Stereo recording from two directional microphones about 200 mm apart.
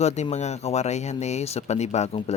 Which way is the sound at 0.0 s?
35° left (ahead or behind).